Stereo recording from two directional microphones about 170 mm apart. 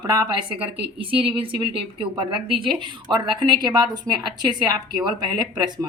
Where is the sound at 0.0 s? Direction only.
25° right (ahead or behind).